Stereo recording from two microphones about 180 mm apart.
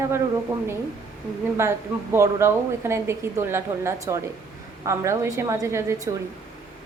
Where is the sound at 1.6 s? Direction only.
15° right (ahead or behind).